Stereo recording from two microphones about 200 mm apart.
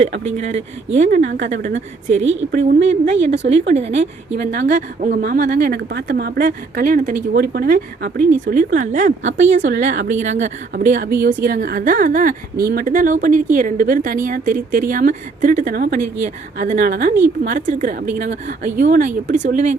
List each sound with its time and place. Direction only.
0.3 s speech: 35° right (ahead or behind)
2.2 s a woman's voice: 65° right (ahead or behind)
2.5 s a woman's voice: 45° right (ahead or behind)
2.9 s speech: 35° right (ahead or behind)
4.5 s a woman's voice: 40° right (ahead or behind)